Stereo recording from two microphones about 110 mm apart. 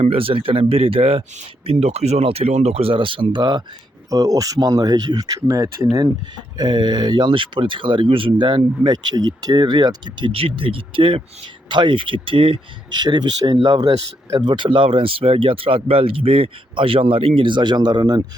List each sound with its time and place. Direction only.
0.0 s speech: 60° right (ahead or behind)
4.1 s speech: 35° right (ahead or behind)
6.6 s speech: 40° right (ahead or behind)